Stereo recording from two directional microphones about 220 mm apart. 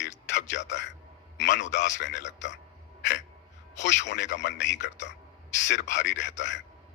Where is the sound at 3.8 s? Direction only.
55° left (ahead or behind).